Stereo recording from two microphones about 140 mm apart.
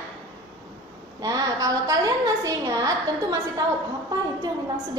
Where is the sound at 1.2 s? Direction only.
25° right (ahead or behind).